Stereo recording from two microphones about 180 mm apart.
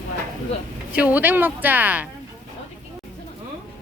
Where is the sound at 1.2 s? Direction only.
10° right (ahead or behind).